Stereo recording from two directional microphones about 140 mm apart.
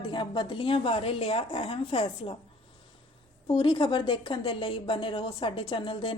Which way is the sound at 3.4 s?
35° left (ahead or behind).